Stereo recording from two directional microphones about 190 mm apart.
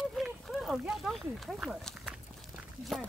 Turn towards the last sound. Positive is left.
turn(degrees=0)  # may be behind; listen again after turning